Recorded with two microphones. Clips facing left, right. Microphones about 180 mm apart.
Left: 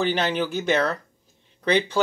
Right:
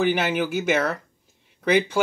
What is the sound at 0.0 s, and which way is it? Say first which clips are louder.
Speech: right 1 dB; 10° right (ahead or behind).